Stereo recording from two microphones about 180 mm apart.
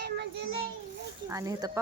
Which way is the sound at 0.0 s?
70° right (ahead or behind).